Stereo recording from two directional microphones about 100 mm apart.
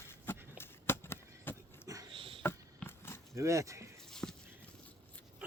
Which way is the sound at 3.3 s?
30° right (ahead or behind).